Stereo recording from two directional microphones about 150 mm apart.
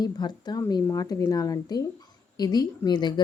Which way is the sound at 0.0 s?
30° left (ahead or behind).